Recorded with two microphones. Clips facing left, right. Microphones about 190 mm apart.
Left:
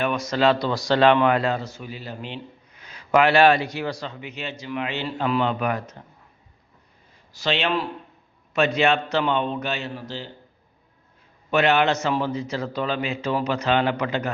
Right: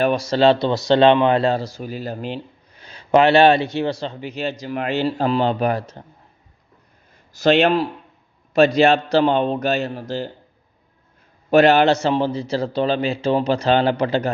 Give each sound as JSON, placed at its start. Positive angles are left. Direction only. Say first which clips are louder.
{"t": 0.0, "sound": "a man's voice", "louder": "right 5 dB", "side_deg": -30}
{"t": 7.3, "sound": "a man's voice", "louder": "right 9 dB", "side_deg": -45}
{"t": 11.5, "sound": "a man's voice", "louder": "right 6 dB", "side_deg": -35}